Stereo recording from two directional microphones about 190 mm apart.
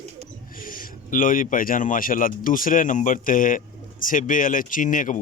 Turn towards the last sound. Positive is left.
turn(degrees=45)  # may be behind; listen again after turning